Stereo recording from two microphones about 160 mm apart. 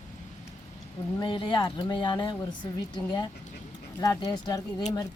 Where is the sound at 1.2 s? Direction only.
30° left (ahead or behind).